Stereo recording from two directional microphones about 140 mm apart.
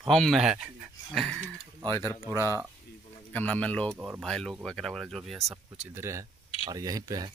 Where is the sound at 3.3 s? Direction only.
10° left (ahead or behind).